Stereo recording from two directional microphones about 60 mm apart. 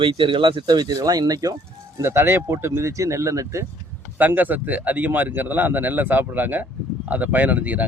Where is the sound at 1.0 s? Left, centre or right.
Right.